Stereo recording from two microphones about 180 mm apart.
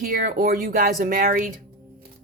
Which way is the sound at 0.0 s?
55° right (ahead or behind).